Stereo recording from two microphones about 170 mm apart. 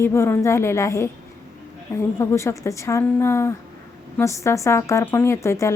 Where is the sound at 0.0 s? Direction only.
15° left (ahead or behind).